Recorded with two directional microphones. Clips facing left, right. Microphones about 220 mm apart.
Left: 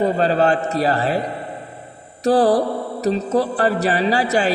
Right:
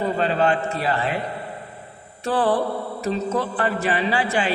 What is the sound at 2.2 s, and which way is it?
Mantra, 40° left (ahead or behind).